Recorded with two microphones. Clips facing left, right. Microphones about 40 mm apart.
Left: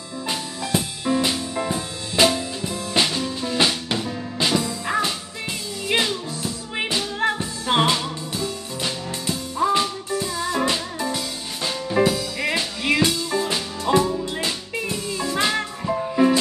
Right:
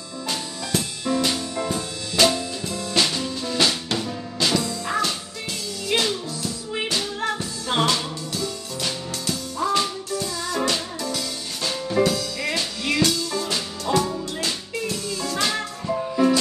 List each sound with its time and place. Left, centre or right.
0.3 s music: centre